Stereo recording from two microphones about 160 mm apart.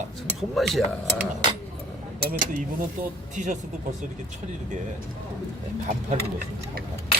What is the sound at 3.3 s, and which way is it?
Speech, 50° right (ahead or behind).